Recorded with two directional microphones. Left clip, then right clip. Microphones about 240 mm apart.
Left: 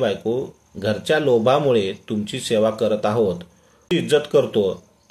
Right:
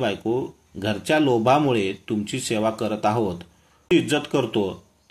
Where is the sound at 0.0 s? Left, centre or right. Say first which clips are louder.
Left 3 dB; right.